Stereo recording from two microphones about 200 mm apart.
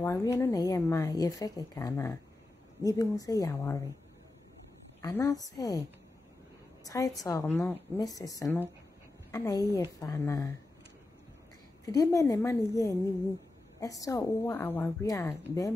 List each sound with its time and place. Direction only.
0.0 s a woman's voice: 15° left (ahead or behind)
5.0 s a woman's voice: 15° left (ahead or behind)
11.8 s a woman's voice: 15° left (ahead or behind)